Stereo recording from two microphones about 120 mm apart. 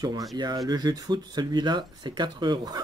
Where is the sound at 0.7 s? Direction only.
35° right (ahead or behind).